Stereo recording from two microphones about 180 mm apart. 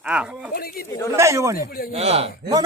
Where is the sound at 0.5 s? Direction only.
55° left (ahead or behind).